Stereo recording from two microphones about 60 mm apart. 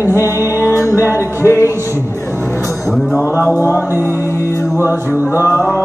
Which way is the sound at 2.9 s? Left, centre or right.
Centre.